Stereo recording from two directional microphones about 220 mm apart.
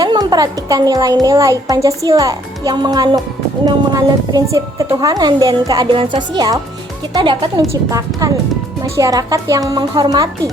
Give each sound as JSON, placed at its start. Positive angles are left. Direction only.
{"t": 0.0, "sound": "a child's voice", "side_deg": -20}